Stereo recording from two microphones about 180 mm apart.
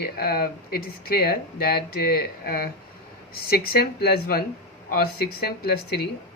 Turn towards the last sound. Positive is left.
turn(degrees=60)  # may be behind; listen again after turning